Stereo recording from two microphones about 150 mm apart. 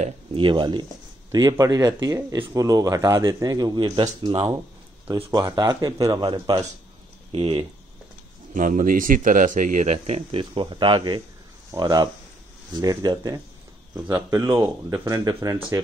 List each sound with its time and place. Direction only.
0.0 s speech: 35° right (ahead or behind)
8.5 s speech: 60° right (ahead or behind); by 15.8 s 25° right (ahead or behind)